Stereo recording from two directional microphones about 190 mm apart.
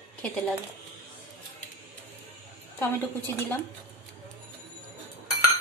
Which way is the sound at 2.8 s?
10° left (ahead or behind).